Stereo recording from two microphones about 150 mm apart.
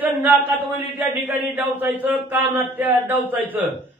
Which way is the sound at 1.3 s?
10° right (ahead or behind).